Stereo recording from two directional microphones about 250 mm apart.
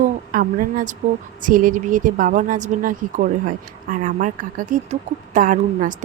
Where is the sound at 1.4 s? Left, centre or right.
Right.